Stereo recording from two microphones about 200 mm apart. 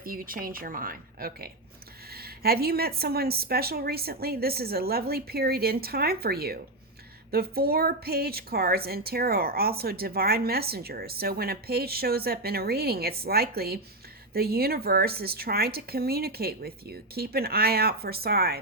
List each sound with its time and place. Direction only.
0.0 s a woman's voice: 45° right (ahead or behind)